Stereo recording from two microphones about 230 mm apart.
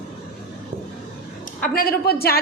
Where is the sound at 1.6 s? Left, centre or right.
Left.